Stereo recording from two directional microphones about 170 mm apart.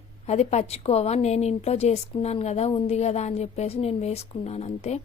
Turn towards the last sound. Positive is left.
turn(degrees=40)  # may be behind; listen again after turning